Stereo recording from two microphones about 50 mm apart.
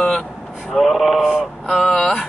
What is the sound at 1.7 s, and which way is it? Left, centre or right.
Speech, centre.